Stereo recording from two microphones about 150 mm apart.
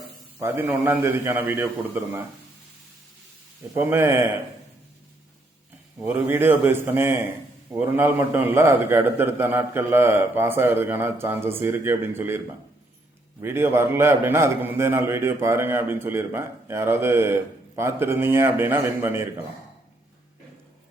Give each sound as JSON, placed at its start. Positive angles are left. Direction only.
{"t": 0.3, "sound": "a man's voice", "side_deg": -15}
{"t": 3.8, "sound": "a man's voice", "side_deg": -15}
{"t": 6.1, "sound": "a man's voice", "side_deg": -15}
{"t": 13.4, "sound": "a man's voice", "side_deg": -15}